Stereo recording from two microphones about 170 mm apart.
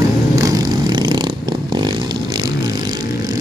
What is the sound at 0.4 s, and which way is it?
Vehicle, 20° right (ahead or behind).